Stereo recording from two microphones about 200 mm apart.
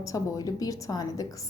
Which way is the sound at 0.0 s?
15° left (ahead or behind).